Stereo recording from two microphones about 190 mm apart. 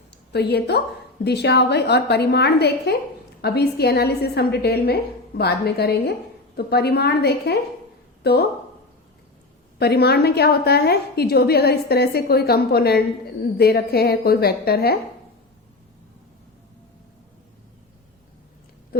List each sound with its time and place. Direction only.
0.3 s a woman's voice: 60° left (ahead or behind)
9.7 s a woman's voice: 60° left (ahead or behind)